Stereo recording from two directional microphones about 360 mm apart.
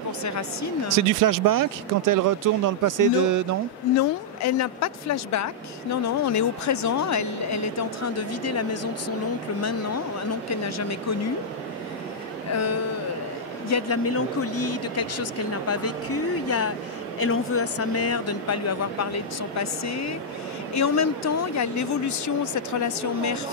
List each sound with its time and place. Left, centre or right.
0.2 s speech: left
0.8 s speech: right
3.9 s speech: left
10.5 s speech: left
13.7 s speech: left